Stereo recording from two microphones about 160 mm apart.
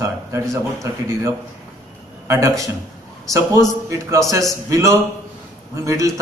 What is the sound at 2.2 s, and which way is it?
A man's voice, 20° right (ahead or behind).